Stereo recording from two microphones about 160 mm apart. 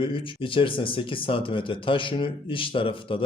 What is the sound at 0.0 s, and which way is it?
Speech, 35° left (ahead or behind).